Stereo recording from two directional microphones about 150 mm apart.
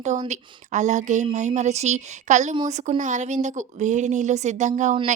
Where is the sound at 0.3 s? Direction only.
55° right (ahead or behind).